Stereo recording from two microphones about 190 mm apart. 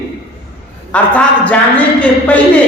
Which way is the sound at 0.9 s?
5° left (ahead or behind).